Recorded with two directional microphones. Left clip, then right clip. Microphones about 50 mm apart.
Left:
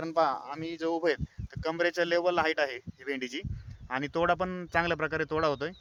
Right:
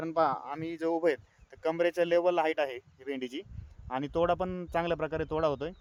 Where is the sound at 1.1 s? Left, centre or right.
Right.